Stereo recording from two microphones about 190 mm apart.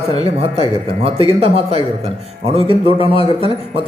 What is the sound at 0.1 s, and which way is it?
A man's voice, 30° right (ahead or behind).